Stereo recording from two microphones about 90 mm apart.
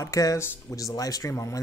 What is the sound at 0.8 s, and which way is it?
Speech, 40° left (ahead or behind).